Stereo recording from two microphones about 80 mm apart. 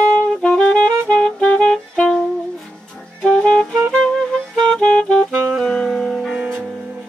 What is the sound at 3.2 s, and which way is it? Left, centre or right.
Music, centre.